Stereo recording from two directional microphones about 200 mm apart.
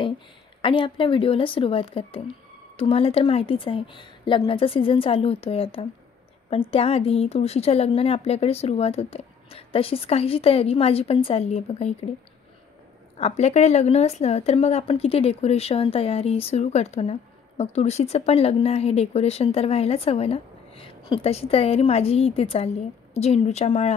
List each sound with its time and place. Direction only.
0.6 s a woman's voice: 25° left (ahead or behind)
13.2 s speech: 35° left (ahead or behind)